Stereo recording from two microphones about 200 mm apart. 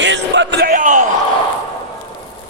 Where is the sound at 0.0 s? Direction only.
65° right (ahead or behind); by 1.0 s 40° right (ahead or behind).